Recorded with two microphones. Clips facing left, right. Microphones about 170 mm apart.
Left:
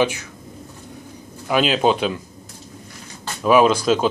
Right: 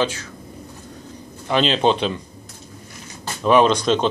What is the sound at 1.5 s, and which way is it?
Speech, 5° left (ahead or behind).